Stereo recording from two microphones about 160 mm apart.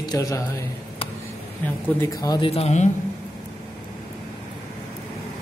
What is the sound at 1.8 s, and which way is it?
Speech, 20° left (ahead or behind).